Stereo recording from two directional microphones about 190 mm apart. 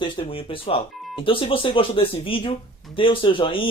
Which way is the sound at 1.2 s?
25° left (ahead or behind).